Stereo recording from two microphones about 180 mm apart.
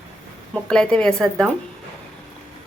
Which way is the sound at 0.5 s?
5° left (ahead or behind).